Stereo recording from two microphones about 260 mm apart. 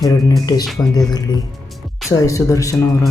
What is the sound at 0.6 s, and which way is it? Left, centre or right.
Speech, centre.